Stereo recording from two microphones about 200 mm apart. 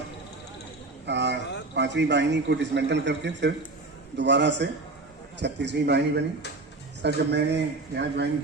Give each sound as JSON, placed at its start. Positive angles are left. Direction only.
{"t": 1.0, "sound": "a man's voice", "side_deg": -60}